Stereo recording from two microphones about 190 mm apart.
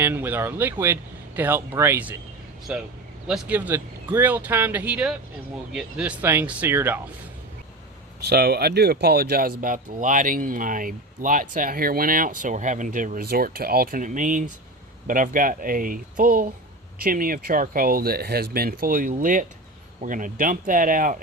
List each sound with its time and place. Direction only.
0.0 s speech: 10° right (ahead or behind)
8.2 s speech: 55° right (ahead or behind)